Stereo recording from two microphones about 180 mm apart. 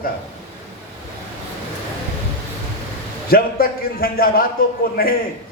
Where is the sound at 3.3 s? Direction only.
55° left (ahead or behind).